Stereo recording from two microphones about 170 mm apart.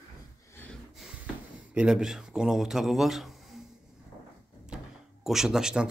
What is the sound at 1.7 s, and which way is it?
Speech, 5° right (ahead or behind).